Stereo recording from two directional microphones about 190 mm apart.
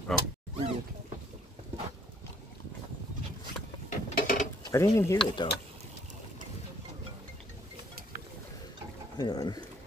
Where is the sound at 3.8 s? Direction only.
45° left (ahead or behind).